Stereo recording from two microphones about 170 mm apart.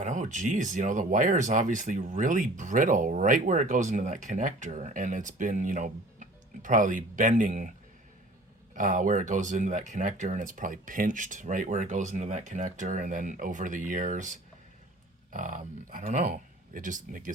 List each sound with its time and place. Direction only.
0.0 s speech: 45° right (ahead or behind)
8.7 s speech: 50° right (ahead or behind)